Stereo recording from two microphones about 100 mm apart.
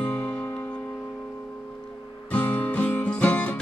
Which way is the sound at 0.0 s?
10° left (ahead or behind).